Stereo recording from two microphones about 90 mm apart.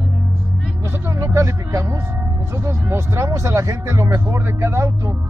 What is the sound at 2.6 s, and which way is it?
Speech, 30° right (ahead or behind).